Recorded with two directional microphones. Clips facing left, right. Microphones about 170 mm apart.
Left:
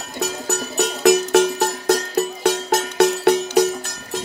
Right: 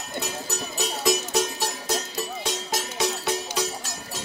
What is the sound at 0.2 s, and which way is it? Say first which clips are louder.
Music: left 10 dB; 70° left (ahead or behind).